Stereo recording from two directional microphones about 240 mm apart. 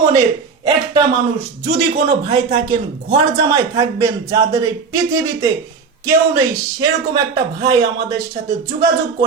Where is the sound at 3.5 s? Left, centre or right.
Centre.